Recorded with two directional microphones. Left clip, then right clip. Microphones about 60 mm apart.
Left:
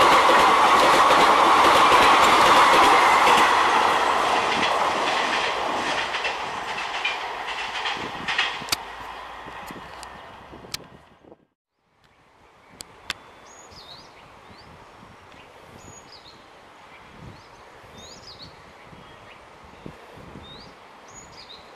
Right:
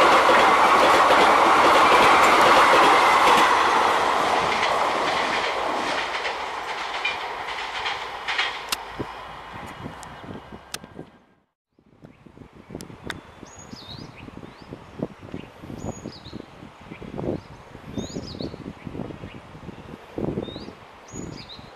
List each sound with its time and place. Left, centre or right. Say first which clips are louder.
0.0 s train: even; left
0.5 s train: even; left
0.7 s train: even; left
1.3 s train: even; left
3.0 s train: even; centre
17.9 s a sound: right 11 dB; right